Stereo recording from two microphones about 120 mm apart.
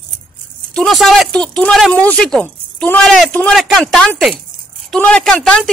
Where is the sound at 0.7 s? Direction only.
Centre (ahead or behind).